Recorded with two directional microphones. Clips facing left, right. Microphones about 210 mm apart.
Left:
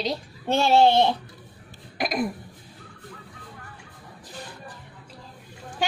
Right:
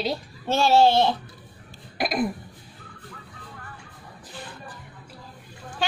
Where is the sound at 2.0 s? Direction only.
Centre (ahead or behind).